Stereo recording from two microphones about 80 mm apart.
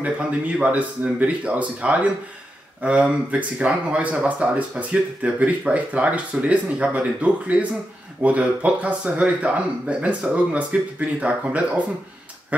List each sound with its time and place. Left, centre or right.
0.0 s speech: centre